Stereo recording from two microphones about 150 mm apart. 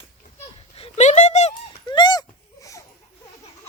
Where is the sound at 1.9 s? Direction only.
30° left (ahead or behind).